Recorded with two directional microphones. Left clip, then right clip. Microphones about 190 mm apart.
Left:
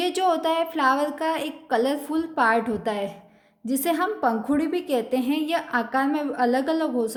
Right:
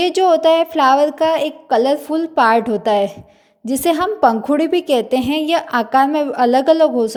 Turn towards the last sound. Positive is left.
turn(degrees=-30)  # may be behind; listen again after turning